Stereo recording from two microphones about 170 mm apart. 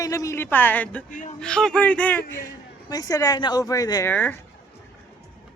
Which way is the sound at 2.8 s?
20° left (ahead or behind).